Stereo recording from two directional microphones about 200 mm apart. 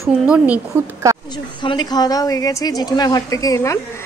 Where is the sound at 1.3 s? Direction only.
20° left (ahead or behind).